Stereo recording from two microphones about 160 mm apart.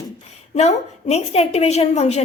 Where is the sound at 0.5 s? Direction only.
40° left (ahead or behind).